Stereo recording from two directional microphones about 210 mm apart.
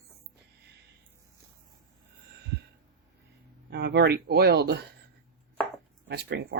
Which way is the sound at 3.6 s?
50° right (ahead or behind).